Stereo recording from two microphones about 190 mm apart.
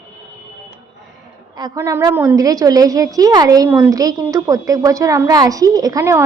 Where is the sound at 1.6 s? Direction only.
20° right (ahead or behind).